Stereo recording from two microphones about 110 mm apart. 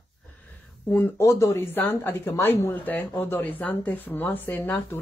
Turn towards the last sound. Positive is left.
turn(degrees=15)  # may be behind; listen again after turning